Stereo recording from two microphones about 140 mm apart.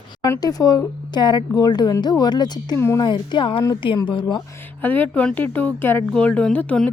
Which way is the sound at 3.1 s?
35° left (ahead or behind).